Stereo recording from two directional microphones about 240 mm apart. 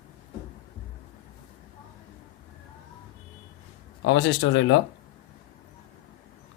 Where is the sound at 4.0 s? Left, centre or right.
Left.